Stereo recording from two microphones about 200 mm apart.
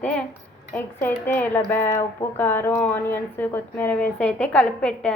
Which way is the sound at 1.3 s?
10° left (ahead or behind).